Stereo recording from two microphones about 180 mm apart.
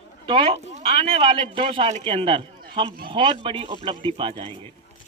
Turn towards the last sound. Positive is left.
turn(degrees=-30)  # may be behind; listen again after turning